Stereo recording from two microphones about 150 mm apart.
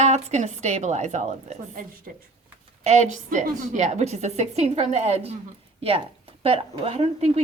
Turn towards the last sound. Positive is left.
turn(degrees=-45)  # may be behind; listen again after turning